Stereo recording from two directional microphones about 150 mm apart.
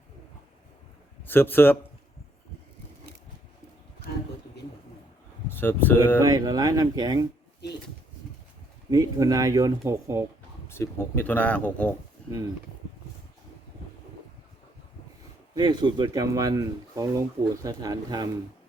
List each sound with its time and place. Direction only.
1.2 s speech: 15° left (ahead or behind)
5.5 s speech: 15° left (ahead or behind)
6.2 s speech: 25° right (ahead or behind)
8.9 s speech: 25° right (ahead or behind)
10.7 s speech: 15° left (ahead or behind)
15.5 s speech: 30° right (ahead or behind)